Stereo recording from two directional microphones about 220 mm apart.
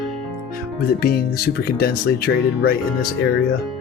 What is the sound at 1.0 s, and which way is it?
Speech, 45° left (ahead or behind).